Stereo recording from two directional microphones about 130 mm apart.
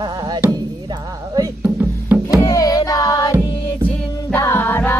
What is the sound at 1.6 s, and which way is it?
Music, 15° right (ahead or behind).